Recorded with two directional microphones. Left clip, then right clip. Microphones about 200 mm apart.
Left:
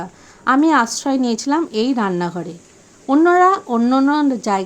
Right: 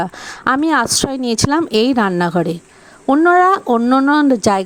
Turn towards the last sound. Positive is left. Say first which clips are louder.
# right 5 dB
turn(degrees=-40)  # may be behind; listen again after turning